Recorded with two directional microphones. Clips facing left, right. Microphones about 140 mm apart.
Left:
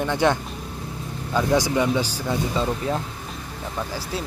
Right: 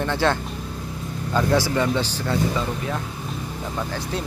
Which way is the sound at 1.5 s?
15° left (ahead or behind).